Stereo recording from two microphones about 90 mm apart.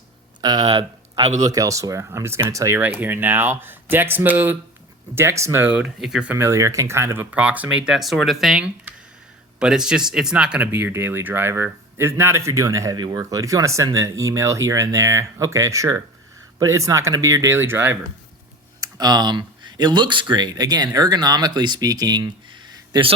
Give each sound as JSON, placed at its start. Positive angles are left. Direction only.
{"t": 0.4, "sound": "speech", "side_deg": -50}
{"t": 1.5, "sound": "speech", "side_deg": -40}
{"t": 2.7, "sound": "speech", "side_deg": -20}
{"t": 5.6, "sound": "speech", "side_deg": -10}
{"t": 6.3, "sound": "speech", "side_deg": -30}
{"t": 7.3, "sound": "speech", "side_deg": -15}
{"t": 10.7, "sound": "speech", "side_deg": -25}
{"t": 13.0, "sound": "speech", "side_deg": -50}
{"t": 18.8, "sound": "speech", "side_deg": -50}